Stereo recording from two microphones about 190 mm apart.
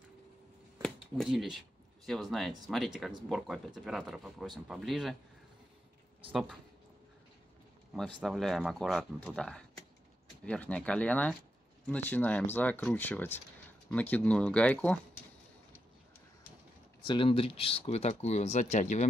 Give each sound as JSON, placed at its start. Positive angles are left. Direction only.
{"t": 0.8, "sound": "speech", "side_deg": 0}
{"t": 7.9, "sound": "speech", "side_deg": 0}
{"t": 17.0, "sound": "speech", "side_deg": 25}